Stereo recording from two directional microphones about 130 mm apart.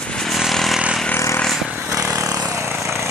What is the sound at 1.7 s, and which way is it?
Vehicle, 10° right (ahead or behind).